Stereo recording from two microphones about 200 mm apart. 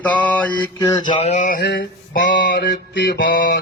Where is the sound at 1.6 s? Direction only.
50° left (ahead or behind).